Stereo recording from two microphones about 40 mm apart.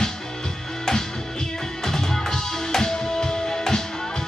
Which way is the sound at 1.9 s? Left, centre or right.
Centre.